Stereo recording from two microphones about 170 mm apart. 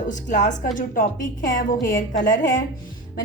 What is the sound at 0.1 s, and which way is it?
A woman's voice, 45° left (ahead or behind).